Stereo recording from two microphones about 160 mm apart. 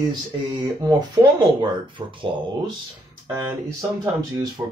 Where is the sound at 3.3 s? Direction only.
15° right (ahead or behind).